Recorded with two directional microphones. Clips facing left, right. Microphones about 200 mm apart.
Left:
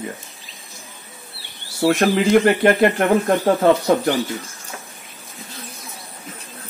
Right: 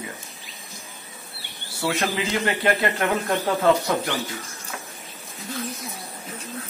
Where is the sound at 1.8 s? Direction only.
50° left (ahead or behind).